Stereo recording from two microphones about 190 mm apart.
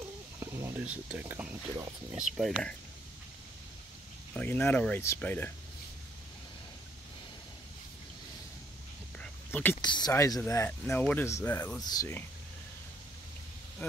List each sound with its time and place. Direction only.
0.4 s speech: 15° right (ahead or behind)
4.3 s speech: 10° left (ahead or behind)
9.2 s a sound: 10° left (ahead or behind)
9.8 s speech: 20° left (ahead or behind)
11.8 s speech: 20° left (ahead or behind)